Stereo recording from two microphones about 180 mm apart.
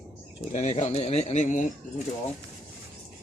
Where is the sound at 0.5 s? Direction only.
40° left (ahead or behind).